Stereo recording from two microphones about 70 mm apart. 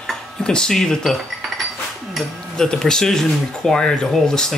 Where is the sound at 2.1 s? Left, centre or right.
Centre.